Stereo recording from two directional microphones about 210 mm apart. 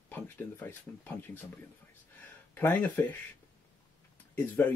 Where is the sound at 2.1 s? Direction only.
10° left (ahead or behind).